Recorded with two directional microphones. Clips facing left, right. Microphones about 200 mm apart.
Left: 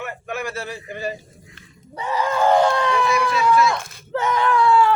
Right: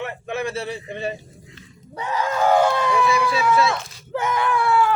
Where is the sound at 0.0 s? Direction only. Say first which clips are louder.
Right 2 dB; 25° right (ahead or behind).